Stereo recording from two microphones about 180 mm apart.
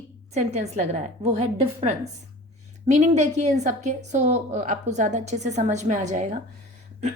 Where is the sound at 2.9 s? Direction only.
40° right (ahead or behind).